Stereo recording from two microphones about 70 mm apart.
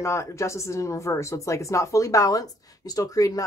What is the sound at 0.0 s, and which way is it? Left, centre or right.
Speech, left.